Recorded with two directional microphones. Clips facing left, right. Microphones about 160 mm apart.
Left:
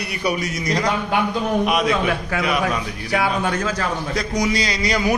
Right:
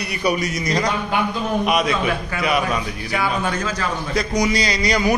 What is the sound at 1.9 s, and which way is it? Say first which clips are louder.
A man's voice: left 1 dB; 70° left (ahead or behind).